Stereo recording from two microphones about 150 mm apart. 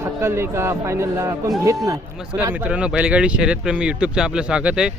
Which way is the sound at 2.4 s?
10° right (ahead or behind).